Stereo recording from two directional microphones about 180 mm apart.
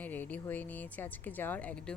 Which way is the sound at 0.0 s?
10° left (ahead or behind).